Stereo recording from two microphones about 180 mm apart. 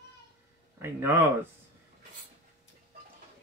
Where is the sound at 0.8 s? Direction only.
10° right (ahead or behind).